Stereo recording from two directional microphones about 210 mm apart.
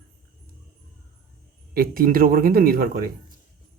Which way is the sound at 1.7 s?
45° right (ahead or behind).